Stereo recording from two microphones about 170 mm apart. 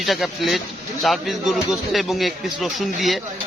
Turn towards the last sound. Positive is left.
turn(degrees=0)  # may be behind; listen again after turning